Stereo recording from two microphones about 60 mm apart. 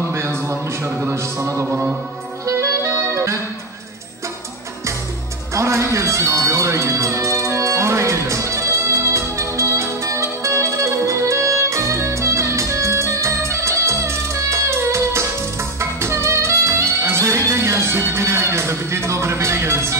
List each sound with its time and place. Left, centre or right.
0.1 s music: right
2.4 s clarinet: right
5.5 s music: right